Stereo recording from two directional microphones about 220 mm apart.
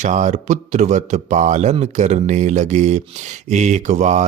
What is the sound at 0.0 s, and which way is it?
Speech, 35° right (ahead or behind).